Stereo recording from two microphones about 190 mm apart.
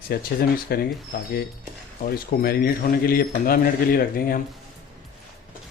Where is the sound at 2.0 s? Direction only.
50° left (ahead or behind).